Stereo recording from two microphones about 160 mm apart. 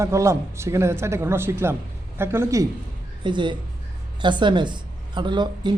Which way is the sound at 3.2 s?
30° right (ahead or behind).